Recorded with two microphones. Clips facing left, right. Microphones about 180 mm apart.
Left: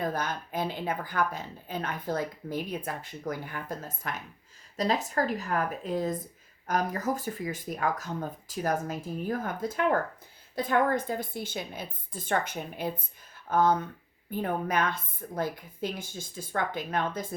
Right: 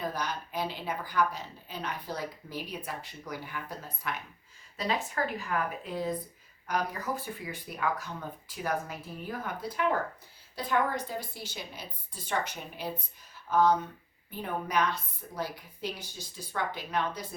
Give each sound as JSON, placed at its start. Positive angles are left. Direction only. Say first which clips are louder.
{"t": 0.0, "sound": "a woman's voice", "louder": "left 3 dB", "side_deg": 50}